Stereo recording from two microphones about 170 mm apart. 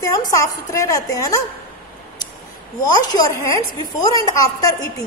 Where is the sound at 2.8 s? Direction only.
20° left (ahead or behind).